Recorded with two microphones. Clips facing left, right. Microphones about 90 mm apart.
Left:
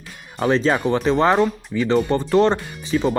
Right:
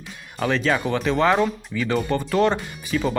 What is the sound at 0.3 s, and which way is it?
Speech, 30° left (ahead or behind).